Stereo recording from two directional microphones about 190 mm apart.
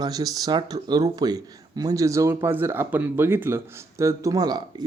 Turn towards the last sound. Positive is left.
turn(degrees=-20)  # may be behind; listen again after turning